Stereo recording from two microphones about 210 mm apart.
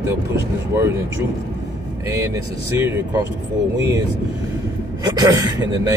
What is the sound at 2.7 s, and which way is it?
Speech, 10° right (ahead or behind).